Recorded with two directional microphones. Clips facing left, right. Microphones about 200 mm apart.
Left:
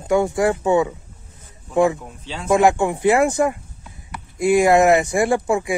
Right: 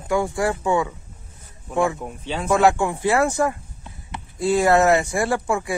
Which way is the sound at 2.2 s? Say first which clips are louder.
Right 8 dB; 55° right (ahead or behind).